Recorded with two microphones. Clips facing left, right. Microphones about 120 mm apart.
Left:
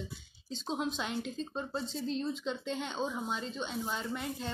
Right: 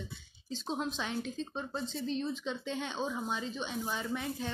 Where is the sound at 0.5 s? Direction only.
Centre (ahead or behind).